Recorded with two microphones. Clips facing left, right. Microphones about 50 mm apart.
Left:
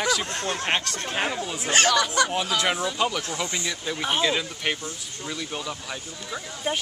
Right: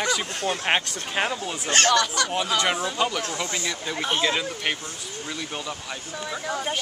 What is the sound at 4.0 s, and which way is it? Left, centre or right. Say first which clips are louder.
Speech: even; centre.